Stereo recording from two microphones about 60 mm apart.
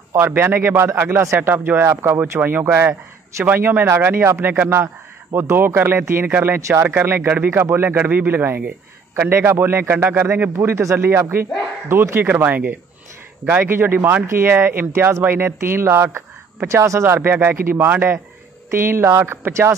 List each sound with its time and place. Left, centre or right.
0.1 s a man's voice: right
1.9 s a man's voice: right
5.3 s a man's voice: right
9.1 s a man's voice: right
12.3 s a man's voice: right
14.2 s a man's voice: right
17.0 s a man's voice: right
18.7 s speech: right